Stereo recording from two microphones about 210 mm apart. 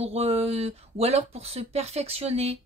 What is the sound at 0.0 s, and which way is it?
Speech, 30° right (ahead or behind).